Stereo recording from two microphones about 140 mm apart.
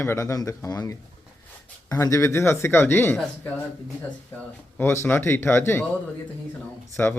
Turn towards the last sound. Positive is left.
turn(degrees=10)  # may be behind; listen again after turning